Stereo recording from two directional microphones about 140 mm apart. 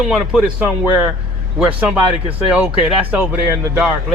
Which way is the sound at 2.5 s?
10° right (ahead or behind).